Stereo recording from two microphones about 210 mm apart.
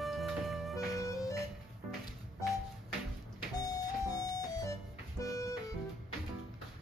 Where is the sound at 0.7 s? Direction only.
15° left (ahead or behind).